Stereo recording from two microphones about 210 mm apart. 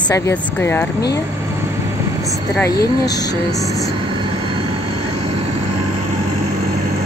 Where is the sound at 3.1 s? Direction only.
20° left (ahead or behind).